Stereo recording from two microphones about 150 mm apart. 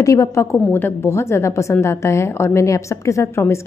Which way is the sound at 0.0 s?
20° left (ahead or behind).